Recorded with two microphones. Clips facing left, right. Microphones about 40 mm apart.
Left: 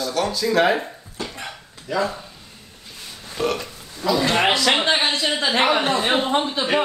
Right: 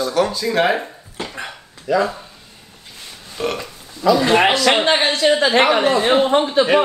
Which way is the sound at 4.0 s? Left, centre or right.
Right.